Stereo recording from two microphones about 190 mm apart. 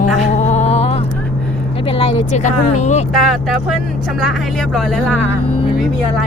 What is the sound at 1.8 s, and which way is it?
Speech, 30° left (ahead or behind).